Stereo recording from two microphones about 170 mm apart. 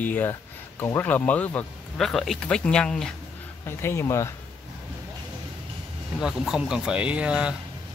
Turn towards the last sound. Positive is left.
turn(degrees=-5)  # may be behind; listen again after turning